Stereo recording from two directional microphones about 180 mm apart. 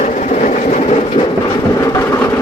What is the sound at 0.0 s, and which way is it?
Train, 40° left (ahead or behind).